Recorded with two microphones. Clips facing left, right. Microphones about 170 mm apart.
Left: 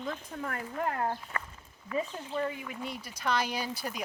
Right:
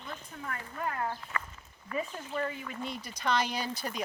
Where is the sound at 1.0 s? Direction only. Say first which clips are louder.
Left 2 dB; 35° left (ahead or behind).